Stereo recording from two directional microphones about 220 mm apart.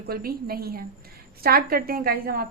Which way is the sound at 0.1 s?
40° right (ahead or behind).